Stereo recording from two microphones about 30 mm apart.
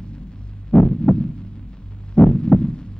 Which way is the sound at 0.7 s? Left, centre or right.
Left.